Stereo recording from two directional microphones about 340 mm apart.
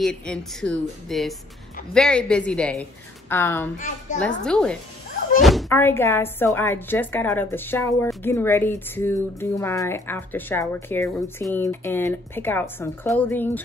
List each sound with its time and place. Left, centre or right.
0.0 s a woman's voice: centre
3.7 s a child's voice: left
4.5 s a woman's voice: centre